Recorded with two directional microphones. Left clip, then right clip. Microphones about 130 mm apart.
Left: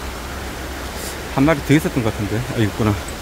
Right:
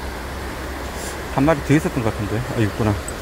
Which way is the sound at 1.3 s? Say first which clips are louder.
Left 1 dB; 25° left (ahead or behind).